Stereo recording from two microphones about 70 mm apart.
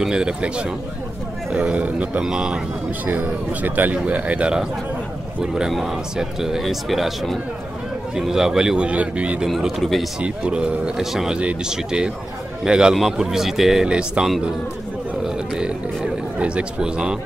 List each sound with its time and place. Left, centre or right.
0.0 s speech: centre
3.1 s speech: right
9.5 s speech: centre
10.2 s speech: centre
15.2 s a sound: centre
16.3 s speech: centre